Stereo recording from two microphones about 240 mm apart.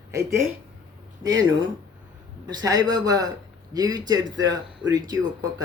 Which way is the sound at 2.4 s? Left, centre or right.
Centre.